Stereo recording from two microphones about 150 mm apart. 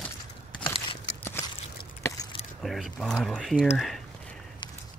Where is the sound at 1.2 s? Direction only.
15° left (ahead or behind).